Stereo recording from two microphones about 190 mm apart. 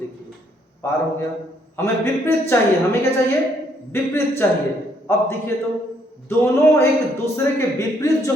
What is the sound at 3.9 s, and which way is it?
Speech, 15° left (ahead or behind).